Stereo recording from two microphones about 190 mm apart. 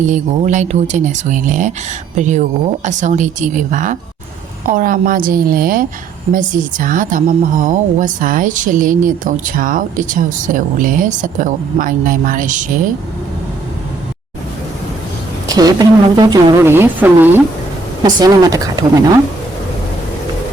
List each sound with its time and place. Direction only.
0.0 s a woman's voice: 40° right (ahead or behind)
15.5 s a woman's voice: 20° right (ahead or behind)